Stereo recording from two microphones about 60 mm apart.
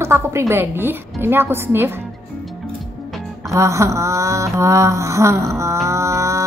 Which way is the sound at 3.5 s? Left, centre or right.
Right.